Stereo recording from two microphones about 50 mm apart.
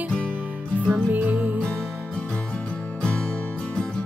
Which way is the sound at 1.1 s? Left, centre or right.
Right.